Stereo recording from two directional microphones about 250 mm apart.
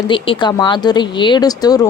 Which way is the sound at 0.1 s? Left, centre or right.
Centre.